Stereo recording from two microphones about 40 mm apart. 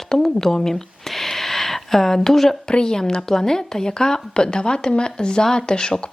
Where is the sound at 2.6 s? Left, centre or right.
Centre.